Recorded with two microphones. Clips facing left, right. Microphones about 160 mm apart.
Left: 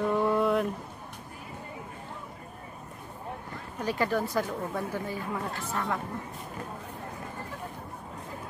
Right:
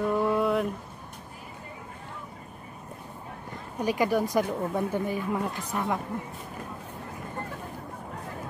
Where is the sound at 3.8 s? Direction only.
15° right (ahead or behind).